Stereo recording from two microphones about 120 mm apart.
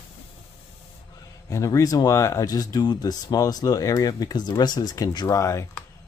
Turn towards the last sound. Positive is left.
turn(degrees=25)  # may be behind; listen again after turning